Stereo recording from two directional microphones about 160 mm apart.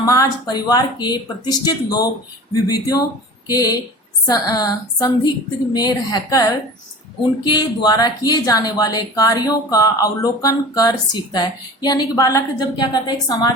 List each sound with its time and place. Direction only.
0.0 s speech: 20° left (ahead or behind)
7.4 s speech: 25° left (ahead or behind)